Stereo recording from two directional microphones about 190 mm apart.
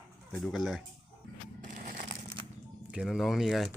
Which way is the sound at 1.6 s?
45° right (ahead or behind).